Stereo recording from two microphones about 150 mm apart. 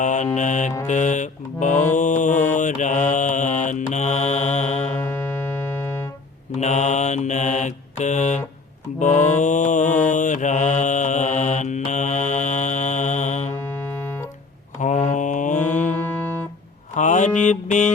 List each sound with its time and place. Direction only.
0.0 s speech: 55° left (ahead or behind)
2.0 s mantra: 55° left (ahead or behind)
4.9 s keyboard: 15° left (ahead or behind)
6.6 s mantra: 50° left (ahead or behind)
13.7 s synthesizer: 15° left (ahead or behind)
14.8 s mantra: 55° left (ahead or behind)
15.6 s music: 10° left (ahead or behind)
16.9 s mantra: 55° left (ahead or behind)